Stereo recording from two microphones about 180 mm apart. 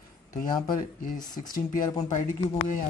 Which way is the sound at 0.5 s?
25° left (ahead or behind).